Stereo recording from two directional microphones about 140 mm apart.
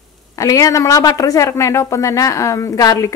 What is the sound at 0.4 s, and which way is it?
Speech, 25° left (ahead or behind).